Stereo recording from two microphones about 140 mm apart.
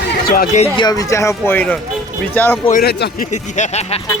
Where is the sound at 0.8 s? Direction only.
25° left (ahead or behind); by 2.6 s 10° left (ahead or behind).